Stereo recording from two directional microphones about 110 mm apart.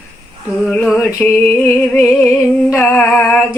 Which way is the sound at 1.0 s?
25° left (ahead or behind).